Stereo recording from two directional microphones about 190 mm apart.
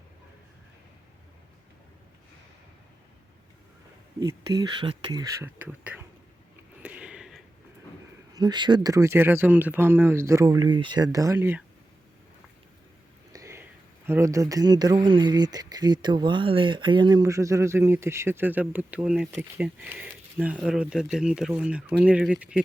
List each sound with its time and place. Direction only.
4.2 s speech: 20° right (ahead or behind)
5.6 s speech: 5° right (ahead or behind)
6.8 s a sound: 5° right (ahead or behind)
8.3 s speech: 20° right (ahead or behind)
13.3 s a sound: 15° right (ahead or behind)
14.1 s speech: 15° right (ahead or behind)